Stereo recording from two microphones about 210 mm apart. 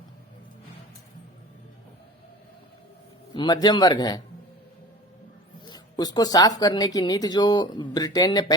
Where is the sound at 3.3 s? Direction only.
20° left (ahead or behind).